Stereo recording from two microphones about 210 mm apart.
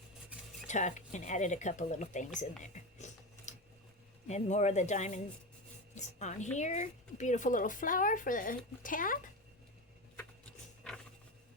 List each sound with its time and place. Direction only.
0.7 s speech: 35° left (ahead or behind)
3.0 s a sound: 35° left (ahead or behind)
4.3 s speech: 35° left (ahead or behind)